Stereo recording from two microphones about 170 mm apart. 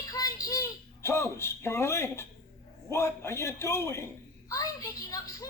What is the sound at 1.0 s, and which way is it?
A man's voice, 15° left (ahead or behind).